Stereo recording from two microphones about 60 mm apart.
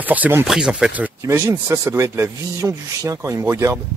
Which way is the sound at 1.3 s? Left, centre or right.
Right.